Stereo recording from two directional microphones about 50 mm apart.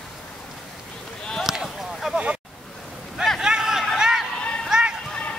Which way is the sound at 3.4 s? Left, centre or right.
Centre.